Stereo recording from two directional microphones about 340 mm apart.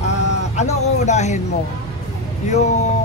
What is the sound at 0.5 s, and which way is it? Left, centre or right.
Speech, centre.